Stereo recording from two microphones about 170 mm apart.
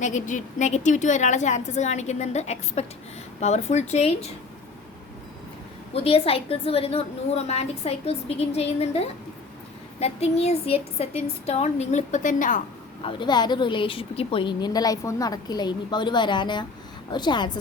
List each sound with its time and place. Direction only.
0.0 s a woman's voice: 45° left (ahead or behind)
5.9 s a woman's voice: 35° left (ahead or behind); by 12.6 s 50° left (ahead or behind)
13.0 s a woman's voice: 30° left (ahead or behind)